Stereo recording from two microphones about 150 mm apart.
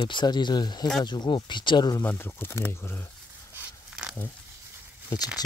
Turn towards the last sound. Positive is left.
turn(degrees=25)  # may be behind; listen again after turning